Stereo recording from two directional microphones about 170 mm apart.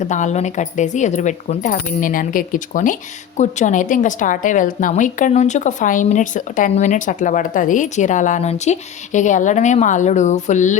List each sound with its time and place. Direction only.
0.0 s a woman's voice: 45° left (ahead or behind)